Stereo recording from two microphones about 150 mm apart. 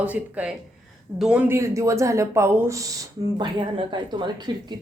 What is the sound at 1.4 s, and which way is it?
Speech, 20° right (ahead or behind).